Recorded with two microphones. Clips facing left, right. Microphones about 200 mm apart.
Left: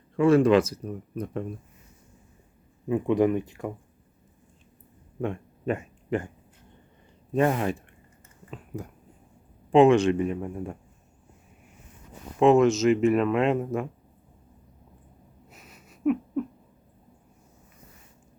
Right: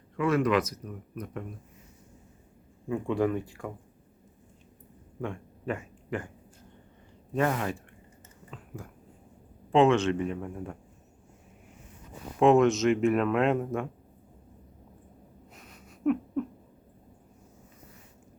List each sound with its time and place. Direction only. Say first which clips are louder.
0.2 s speech: left 7 dB; 30° left (ahead or behind)
2.9 s speech: left 5 dB; 20° left (ahead or behind)
5.2 s speech: left 5 dB; 20° left (ahead or behind)
7.3 s a man's voice: left 4 dB; 25° left (ahead or behind)
12.4 s speech: left 2 dB; centre (ahead or behind)
15.5 s a sound: left 1 dB; 5° left (ahead or behind)